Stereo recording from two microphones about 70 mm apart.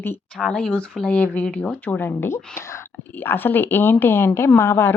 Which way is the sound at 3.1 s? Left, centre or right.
Left.